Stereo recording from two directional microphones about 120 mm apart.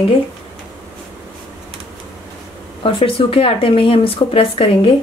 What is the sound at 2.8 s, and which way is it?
Speech, 50° left (ahead or behind).